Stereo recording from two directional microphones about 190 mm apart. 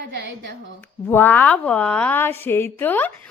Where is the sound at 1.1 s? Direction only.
10° left (ahead or behind).